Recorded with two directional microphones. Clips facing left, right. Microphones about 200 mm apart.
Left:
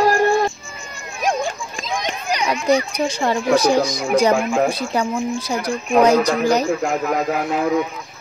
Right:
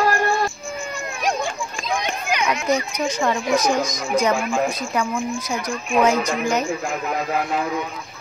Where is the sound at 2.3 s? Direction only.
35° left (ahead or behind).